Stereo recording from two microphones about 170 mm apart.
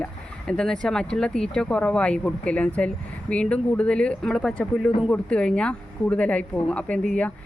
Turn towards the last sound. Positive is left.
turn(degrees=5)  # may be behind; listen again after turning